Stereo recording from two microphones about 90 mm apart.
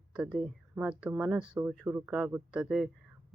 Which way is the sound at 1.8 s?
25° right (ahead or behind).